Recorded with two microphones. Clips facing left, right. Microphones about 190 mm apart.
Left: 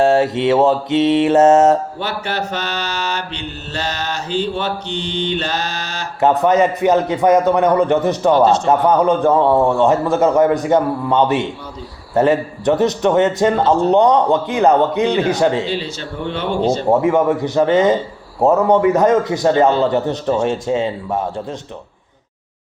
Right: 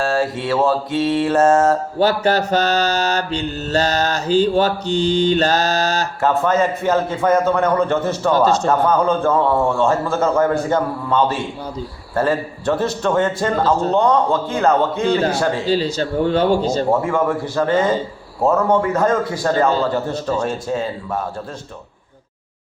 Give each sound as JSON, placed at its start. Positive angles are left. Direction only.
{"t": 0.0, "sound": "a man's voice", "side_deg": 20}
{"t": 2.0, "sound": "mantra", "side_deg": -40}
{"t": 6.1, "sound": "a man's voice", "side_deg": 20}
{"t": 15.6, "sound": "mantra", "side_deg": -40}
{"t": 16.9, "sound": "a man's voice", "side_deg": 20}